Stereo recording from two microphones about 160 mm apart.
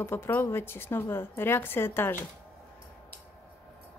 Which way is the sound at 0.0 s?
15° left (ahead or behind).